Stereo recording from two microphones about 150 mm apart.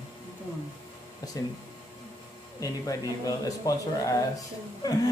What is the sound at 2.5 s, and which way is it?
A man's voice, 20° left (ahead or behind).